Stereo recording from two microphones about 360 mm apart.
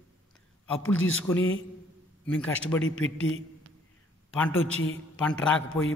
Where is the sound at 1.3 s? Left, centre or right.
Centre.